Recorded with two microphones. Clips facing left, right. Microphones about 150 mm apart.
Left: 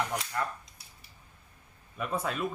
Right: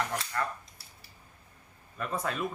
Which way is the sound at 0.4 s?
15° left (ahead or behind).